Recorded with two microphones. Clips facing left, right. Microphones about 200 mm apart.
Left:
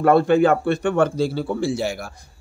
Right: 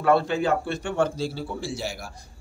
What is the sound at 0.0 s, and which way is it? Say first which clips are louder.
A man's voice: left 7 dB; 50° left (ahead or behind).